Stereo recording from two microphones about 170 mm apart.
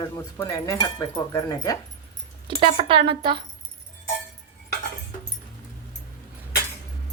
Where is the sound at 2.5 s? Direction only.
30° right (ahead or behind).